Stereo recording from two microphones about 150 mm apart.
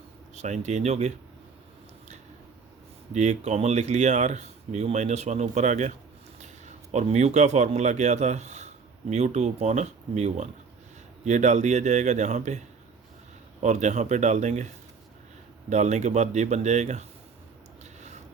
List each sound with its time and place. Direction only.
0.3 s speech: 50° right (ahead or behind)
3.1 s a man's voice: 50° right (ahead or behind)
15.7 s speech: 50° right (ahead or behind)